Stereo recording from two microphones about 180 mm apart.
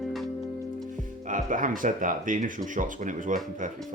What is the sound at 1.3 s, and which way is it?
Speech, 45° right (ahead or behind).